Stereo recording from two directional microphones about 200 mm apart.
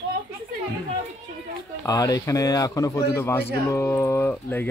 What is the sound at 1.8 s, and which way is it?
Speech, 20° left (ahead or behind).